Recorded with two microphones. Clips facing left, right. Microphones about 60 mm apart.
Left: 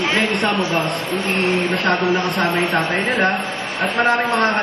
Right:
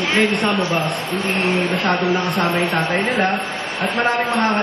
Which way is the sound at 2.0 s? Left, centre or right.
Left.